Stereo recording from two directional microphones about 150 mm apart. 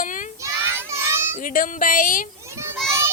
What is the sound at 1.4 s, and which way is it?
Speech, 65° left (ahead or behind).